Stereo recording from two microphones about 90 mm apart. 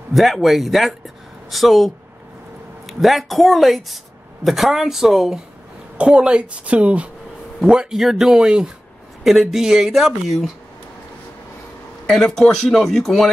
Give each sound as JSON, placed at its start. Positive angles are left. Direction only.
{"t": 0.1, "sound": "speech", "side_deg": 0}
{"t": 2.9, "sound": "a woman's voice", "side_deg": 0}
{"t": 12.1, "sound": "speech", "side_deg": 5}